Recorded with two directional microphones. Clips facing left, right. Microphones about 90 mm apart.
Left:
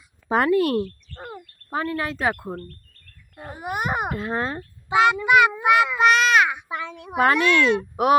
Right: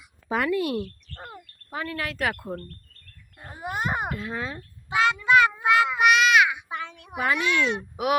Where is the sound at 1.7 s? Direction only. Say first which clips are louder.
Left 5 dB; 30° left (ahead or behind).